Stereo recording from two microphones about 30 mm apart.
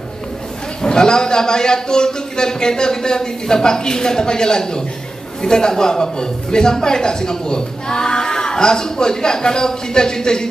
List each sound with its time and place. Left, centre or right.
0.8 s a man's voice: left